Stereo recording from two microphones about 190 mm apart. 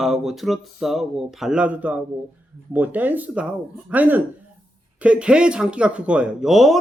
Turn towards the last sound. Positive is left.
turn(degrees=0)  # may be behind; listen again after turning